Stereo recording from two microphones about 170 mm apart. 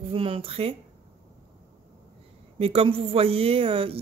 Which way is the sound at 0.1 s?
30° right (ahead or behind).